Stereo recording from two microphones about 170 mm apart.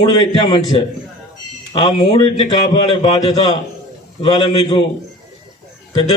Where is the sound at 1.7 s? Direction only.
35° left (ahead or behind).